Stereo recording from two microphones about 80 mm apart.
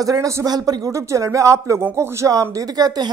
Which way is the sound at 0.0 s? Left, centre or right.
Right.